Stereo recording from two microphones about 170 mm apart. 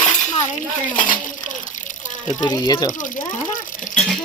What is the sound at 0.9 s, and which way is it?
Speech, 50° left (ahead or behind).